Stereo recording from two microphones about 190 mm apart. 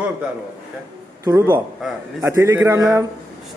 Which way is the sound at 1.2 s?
15° right (ahead or behind).